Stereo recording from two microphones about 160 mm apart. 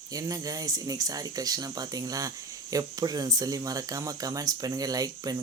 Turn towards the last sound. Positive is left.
turn(degrees=-25)  # may be behind; listen again after turning